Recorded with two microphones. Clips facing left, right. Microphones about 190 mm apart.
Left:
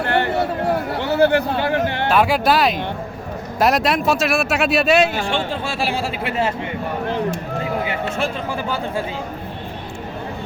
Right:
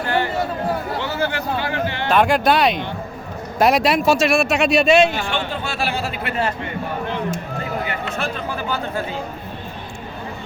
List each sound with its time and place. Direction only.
0.0 s a sound: 60° left (ahead or behind)
0.9 s speech: 55° left (ahead or behind)
2.0 s speech: 5° left (ahead or behind)
5.1 s speech: 30° left (ahead or behind)
7.9 s speech: 25° left (ahead or behind)